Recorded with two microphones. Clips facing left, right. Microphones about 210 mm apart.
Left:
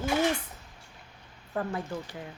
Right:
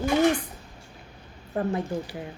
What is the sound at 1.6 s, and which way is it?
Speech, 20° right (ahead or behind).